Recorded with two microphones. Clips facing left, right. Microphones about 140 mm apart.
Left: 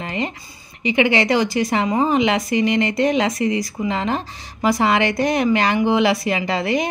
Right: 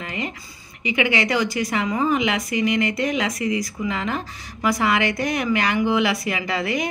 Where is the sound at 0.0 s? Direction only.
30° left (ahead or behind).